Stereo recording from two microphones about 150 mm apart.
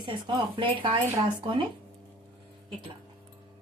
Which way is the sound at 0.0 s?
30° right (ahead or behind).